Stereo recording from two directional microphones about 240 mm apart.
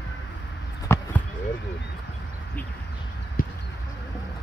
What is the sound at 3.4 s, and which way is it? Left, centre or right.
Pigeon, left.